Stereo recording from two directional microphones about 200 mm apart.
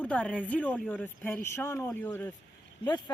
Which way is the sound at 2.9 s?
20° left (ahead or behind).